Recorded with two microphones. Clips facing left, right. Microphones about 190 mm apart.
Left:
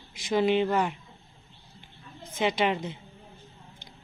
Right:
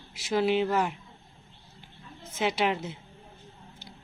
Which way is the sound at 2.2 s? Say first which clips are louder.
Left 1 dB; 5° right (ahead or behind).